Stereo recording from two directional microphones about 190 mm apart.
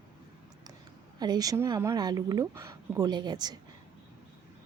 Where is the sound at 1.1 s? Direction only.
20° right (ahead or behind).